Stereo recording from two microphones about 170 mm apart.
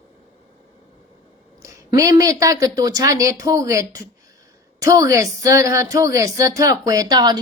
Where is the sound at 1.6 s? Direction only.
20° right (ahead or behind).